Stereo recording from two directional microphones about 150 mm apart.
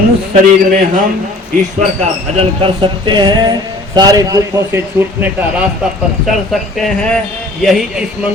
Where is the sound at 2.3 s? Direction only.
35° right (ahead or behind); by 5.3 s 15° right (ahead or behind).